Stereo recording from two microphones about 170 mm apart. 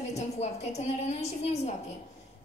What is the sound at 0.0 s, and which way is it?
A woman's voice, 40° left (ahead or behind).